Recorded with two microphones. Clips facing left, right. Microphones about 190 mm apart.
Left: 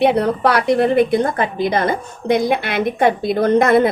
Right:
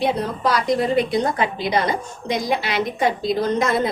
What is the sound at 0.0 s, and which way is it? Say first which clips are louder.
A woman's voice: left 6 dB; 65° left (ahead or behind).